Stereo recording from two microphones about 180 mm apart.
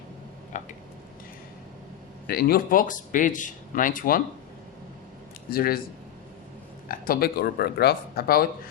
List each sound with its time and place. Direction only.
0.5 s speech: 45° left (ahead or behind)
2.2 s speech: 55° left (ahead or behind)
5.5 s speech: 55° left (ahead or behind)
6.8 s speech: 55° left (ahead or behind)